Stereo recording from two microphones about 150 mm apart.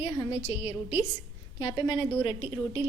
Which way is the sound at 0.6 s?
10° right (ahead or behind).